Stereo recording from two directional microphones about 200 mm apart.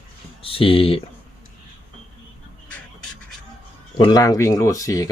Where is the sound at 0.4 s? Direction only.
25° left (ahead or behind).